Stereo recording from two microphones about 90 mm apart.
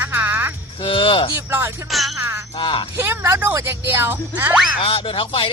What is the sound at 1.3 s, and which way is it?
Speech, 30° right (ahead or behind).